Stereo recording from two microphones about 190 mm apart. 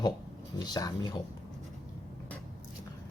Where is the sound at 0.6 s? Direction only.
20° left (ahead or behind).